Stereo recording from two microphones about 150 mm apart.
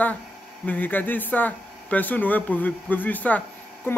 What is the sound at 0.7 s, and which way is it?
Speech, 10° left (ahead or behind).